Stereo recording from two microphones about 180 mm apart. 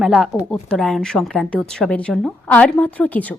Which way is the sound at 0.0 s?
5° right (ahead or behind).